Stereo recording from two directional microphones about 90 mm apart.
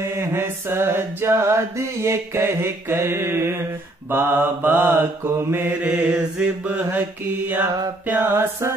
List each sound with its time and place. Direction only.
0.0 s mantra: 30° right (ahead or behind)